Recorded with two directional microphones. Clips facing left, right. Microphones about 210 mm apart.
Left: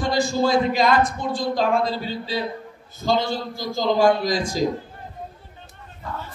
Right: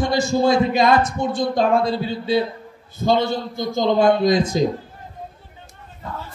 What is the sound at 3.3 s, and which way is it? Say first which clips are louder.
A man's voice: right 4 dB; 25° right (ahead or behind).